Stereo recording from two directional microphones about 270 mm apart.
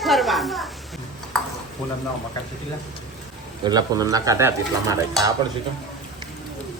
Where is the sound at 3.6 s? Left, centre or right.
Centre.